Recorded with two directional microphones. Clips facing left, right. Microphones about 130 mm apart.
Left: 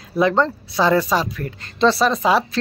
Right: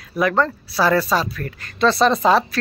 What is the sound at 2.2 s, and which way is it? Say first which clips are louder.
Speech: right 1 dB; 5° left (ahead or behind).